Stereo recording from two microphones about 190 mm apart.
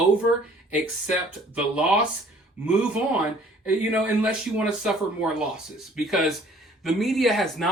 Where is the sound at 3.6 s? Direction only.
5° right (ahead or behind).